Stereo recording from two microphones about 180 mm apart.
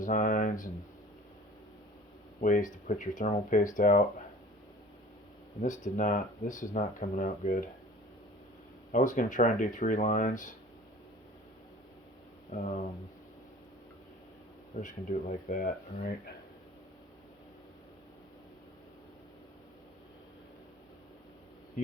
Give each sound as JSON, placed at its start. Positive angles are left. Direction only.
{"t": 0.0, "sound": "speech", "side_deg": 45}
{"t": 2.4, "sound": "speech", "side_deg": 45}
{"t": 5.6, "sound": "speech", "side_deg": 45}
{"t": 8.9, "sound": "speech", "side_deg": 45}
{"t": 12.5, "sound": "speech", "side_deg": 45}
{"t": 14.8, "sound": "speech", "side_deg": 45}